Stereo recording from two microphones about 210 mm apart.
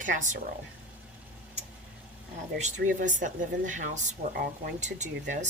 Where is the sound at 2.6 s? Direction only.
40° right (ahead or behind).